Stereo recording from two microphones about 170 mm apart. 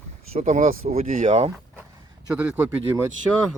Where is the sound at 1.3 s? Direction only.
35° right (ahead or behind).